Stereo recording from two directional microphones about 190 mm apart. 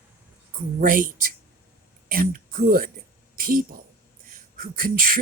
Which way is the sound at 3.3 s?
50° right (ahead or behind).